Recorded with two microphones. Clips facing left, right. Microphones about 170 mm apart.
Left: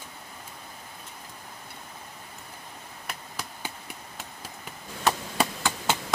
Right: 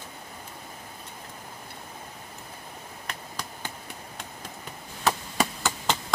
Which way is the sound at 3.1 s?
10° left (ahead or behind).